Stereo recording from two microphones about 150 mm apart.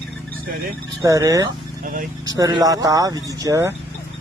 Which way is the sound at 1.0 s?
20° right (ahead or behind).